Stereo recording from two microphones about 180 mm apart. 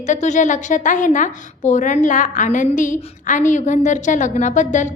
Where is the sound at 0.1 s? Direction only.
40° left (ahead or behind).